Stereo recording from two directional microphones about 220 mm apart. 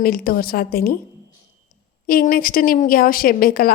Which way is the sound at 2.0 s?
40° left (ahead or behind).